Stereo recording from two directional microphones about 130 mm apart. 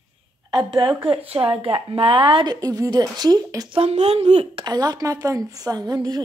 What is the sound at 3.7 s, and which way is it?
Speech, 50° right (ahead or behind).